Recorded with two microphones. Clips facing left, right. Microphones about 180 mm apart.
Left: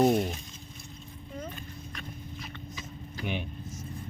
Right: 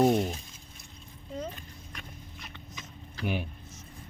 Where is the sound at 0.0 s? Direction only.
5° right (ahead or behind).